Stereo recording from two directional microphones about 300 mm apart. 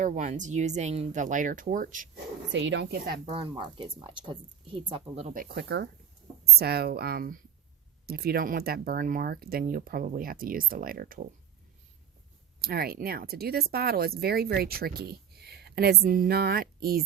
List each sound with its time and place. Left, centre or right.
0.0 s speech: right
2.5 s speech: right
3.3 s a woman's voice: centre
12.6 s speech: right